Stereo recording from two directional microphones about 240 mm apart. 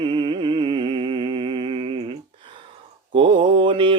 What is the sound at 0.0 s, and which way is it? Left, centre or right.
Music, centre.